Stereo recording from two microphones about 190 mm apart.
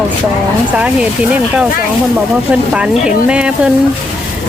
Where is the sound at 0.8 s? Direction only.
5° right (ahead or behind).